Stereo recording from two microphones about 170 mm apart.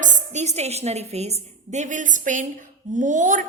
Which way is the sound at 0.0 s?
45° right (ahead or behind).